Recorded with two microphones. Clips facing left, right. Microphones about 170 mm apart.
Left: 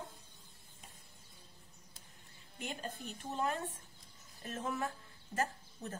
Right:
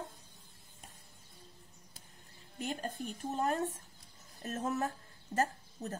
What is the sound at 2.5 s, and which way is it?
A woman's voice, 45° right (ahead or behind).